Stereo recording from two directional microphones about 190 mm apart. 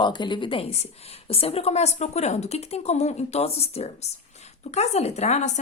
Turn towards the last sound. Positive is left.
turn(degrees=35)  # may be behind; listen again after turning